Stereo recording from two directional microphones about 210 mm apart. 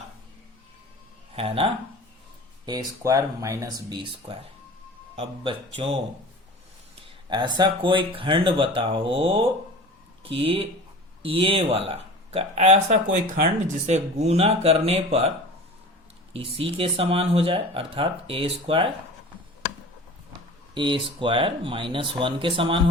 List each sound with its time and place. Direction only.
1.4 s speech: 25° right (ahead or behind)
7.0 s speech: 20° right (ahead or behind)
16.6 s speech: 25° right (ahead or behind)
20.7 s speech: 25° right (ahead or behind)